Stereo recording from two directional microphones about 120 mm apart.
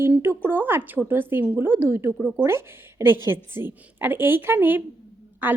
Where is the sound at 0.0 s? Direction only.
20° right (ahead or behind).